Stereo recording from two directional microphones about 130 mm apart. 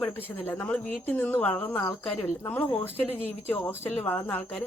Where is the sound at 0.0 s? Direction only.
15° left (ahead or behind).